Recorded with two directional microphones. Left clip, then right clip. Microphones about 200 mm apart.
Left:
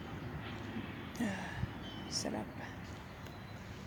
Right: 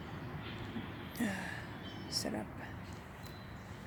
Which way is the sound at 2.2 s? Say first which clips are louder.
Even; centre (ahead or behind).